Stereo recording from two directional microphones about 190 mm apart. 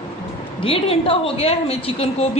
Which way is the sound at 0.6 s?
30° left (ahead or behind).